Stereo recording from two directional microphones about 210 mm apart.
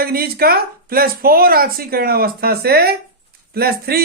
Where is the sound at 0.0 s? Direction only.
45° right (ahead or behind).